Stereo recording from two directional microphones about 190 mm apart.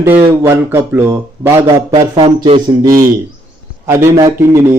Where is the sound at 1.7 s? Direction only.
25° right (ahead or behind).